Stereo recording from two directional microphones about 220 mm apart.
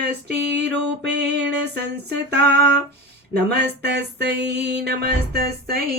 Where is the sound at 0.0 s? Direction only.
50° right (ahead or behind).